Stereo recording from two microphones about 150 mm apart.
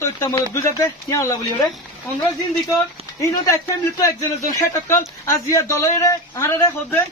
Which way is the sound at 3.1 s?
20° left (ahead or behind).